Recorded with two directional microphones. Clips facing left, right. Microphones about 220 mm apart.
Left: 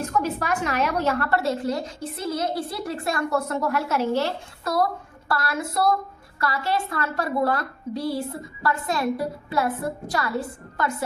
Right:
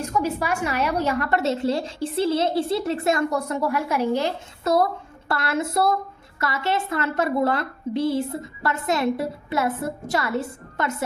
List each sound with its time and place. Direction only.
0.0 s a woman's voice: 10° right (ahead or behind)